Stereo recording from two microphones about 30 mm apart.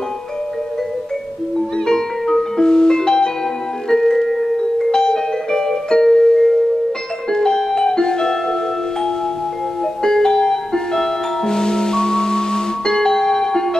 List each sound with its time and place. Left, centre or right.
1.9 s music: centre
10.0 s music: centre